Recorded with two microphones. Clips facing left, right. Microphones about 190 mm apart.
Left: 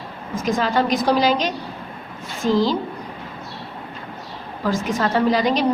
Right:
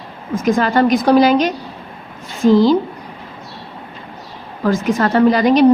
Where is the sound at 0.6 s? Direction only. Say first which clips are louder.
Right 5 dB; 60° right (ahead or behind).